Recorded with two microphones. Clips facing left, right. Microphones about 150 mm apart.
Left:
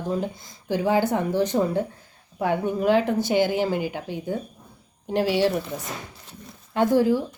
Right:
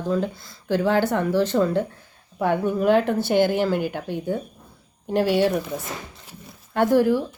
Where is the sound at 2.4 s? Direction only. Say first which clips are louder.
Right 2 dB; 55° right (ahead or behind).